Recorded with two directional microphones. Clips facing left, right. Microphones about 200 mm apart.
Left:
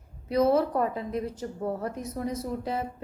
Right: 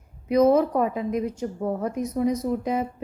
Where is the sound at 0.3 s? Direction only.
15° right (ahead or behind).